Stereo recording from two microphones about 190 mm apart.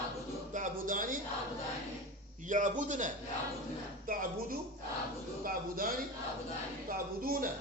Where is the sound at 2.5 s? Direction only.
40° right (ahead or behind).